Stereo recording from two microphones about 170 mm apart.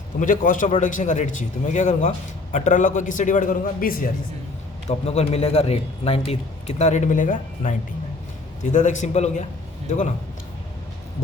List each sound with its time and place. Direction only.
0.2 s a man's voice: 50° left (ahead or behind)
4.9 s a man's voice: 40° left (ahead or behind)